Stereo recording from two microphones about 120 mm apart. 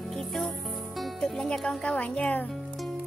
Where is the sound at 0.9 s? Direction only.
Centre (ahead or behind).